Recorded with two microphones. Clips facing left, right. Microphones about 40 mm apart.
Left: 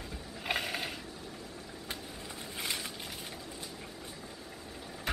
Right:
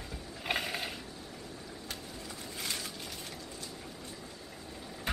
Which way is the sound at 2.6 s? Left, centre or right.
Centre.